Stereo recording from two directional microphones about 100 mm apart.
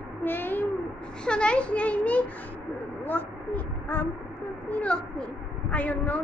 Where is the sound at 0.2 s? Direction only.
20° left (ahead or behind).